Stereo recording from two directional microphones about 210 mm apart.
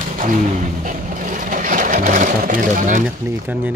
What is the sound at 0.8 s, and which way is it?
Sewing machine, 40° right (ahead or behind).